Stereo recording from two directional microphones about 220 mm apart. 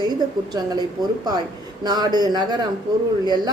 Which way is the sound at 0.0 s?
20° right (ahead or behind).